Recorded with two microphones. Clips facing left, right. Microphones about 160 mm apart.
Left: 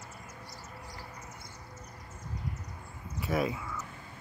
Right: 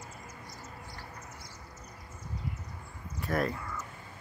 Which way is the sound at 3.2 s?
5° left (ahead or behind).